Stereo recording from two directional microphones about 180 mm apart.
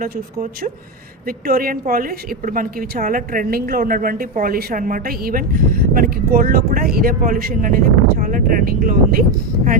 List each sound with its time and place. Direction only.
1.5 s a woman's voice: 50° right (ahead or behind)